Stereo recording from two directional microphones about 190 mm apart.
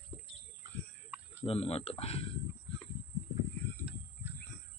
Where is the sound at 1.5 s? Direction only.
30° left (ahead or behind).